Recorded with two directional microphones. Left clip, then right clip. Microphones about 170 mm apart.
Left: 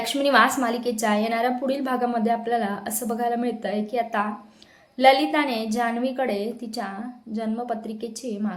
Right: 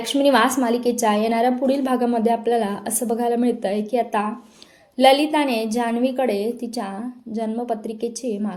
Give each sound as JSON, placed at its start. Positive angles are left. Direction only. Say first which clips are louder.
{"t": 0.0, "sound": "a woman's voice", "louder": "right 2 dB", "side_deg": -20}